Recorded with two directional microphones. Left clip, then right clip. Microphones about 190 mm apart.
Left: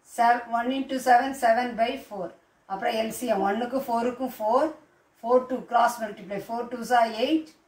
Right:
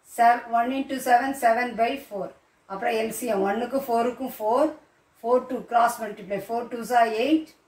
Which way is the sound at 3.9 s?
15° right (ahead or behind).